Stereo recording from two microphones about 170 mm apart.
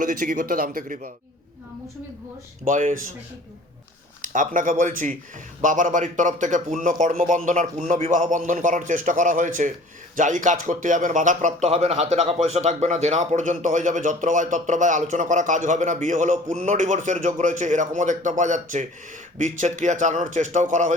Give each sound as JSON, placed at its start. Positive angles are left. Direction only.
{"t": 0.0, "sound": "a man's voice", "side_deg": -55}
{"t": 2.6, "sound": "a man's voice", "side_deg": -50}
{"t": 4.2, "sound": "a man's voice", "side_deg": -50}